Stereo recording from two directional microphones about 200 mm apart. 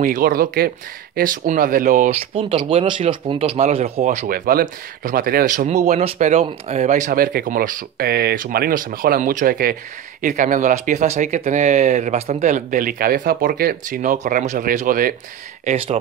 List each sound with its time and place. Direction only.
0.0 s speech: 45° right (ahead or behind)